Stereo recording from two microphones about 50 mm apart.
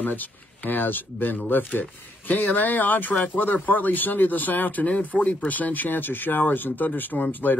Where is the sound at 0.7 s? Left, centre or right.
Left.